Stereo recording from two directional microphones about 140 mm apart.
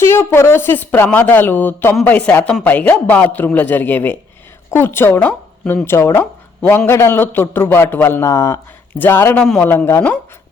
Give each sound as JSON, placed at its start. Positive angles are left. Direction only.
{"t": 0.0, "sound": "a man's voice", "side_deg": 20}